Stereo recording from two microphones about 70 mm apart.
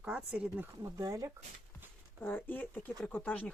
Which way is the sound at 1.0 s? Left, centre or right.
Right.